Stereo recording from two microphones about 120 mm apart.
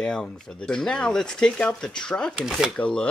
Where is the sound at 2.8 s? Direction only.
10° left (ahead or behind).